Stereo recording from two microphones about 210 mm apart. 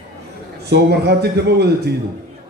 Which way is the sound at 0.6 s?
50° right (ahead or behind).